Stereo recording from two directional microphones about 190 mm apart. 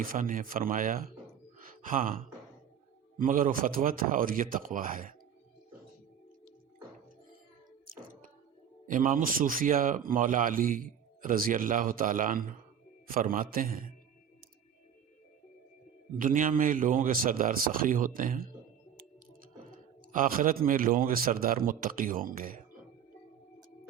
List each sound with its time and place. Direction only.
0.0 s speech: 45° right (ahead or behind)
1.5 s sigh: 45° right (ahead or behind)
3.2 s speech: 45° right (ahead or behind)
8.9 s speech: 45° right (ahead or behind)
16.1 s speech: 45° right (ahead or behind)
19.7 s speech: 45° right (ahead or behind)